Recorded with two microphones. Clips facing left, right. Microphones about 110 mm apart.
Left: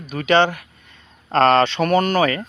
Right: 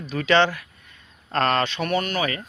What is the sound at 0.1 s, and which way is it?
Speech, 20° left (ahead or behind).